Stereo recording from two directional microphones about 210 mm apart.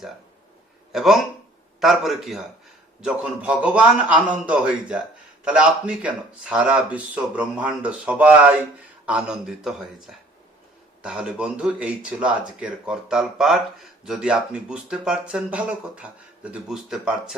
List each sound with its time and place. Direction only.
0.9 s speech: centre (ahead or behind)